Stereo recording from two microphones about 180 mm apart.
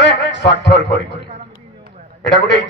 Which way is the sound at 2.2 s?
75° left (ahead or behind).